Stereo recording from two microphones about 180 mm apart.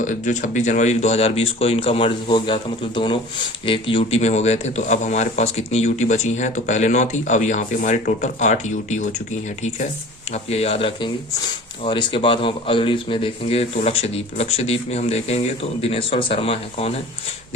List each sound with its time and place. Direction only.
0.0 s speech: 45° left (ahead or behind)
10.3 s speech: 35° left (ahead or behind)